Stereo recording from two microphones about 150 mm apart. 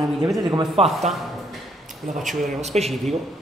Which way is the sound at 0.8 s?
40° right (ahead or behind).